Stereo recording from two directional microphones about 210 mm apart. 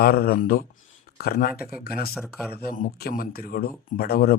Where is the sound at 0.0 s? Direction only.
45° left (ahead or behind).